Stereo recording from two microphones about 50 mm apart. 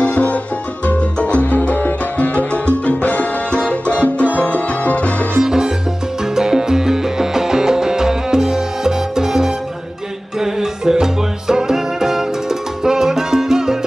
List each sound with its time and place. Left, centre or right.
0.0 s music: left
0.8 s salsa music: left
2.1 s music: left
5.4 s salsa music: centre
6.3 s music: centre